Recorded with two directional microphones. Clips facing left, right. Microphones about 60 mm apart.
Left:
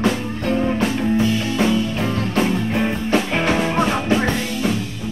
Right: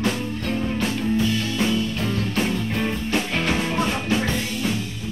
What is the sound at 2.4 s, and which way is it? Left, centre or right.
Music, left.